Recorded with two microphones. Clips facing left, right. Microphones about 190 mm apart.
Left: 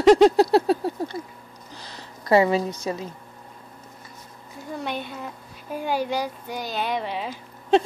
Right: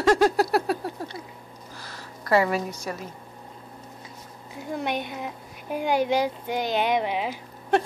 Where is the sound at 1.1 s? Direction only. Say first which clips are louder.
Left 6 dB; 45° left (ahead or behind).